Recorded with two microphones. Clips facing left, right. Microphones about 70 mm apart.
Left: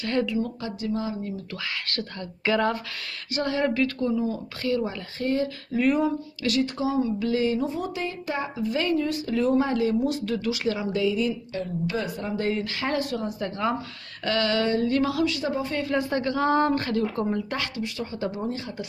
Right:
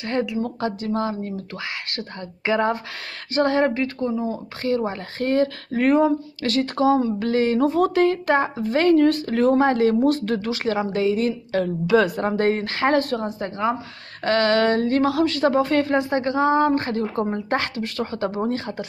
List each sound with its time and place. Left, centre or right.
0.4 s speech: right
1.6 s speech: right
3.3 s speech: right
3.8 s speech: right
5.2 s speech: right
8.5 s speech: right
11.5 s a woman's voice: right
12.2 s speech: right
16.0 s speech: right
16.7 s speech: right